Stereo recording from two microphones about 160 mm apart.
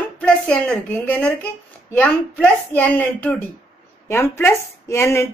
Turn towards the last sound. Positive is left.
turn(degrees=15)  # may be behind; listen again after turning